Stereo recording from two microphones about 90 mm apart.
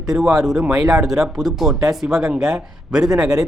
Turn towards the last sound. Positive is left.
turn(degrees=-5)  # may be behind; listen again after turning